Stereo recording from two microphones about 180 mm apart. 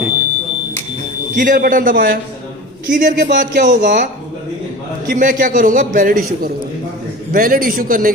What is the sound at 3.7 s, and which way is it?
Speech, 75° right (ahead or behind).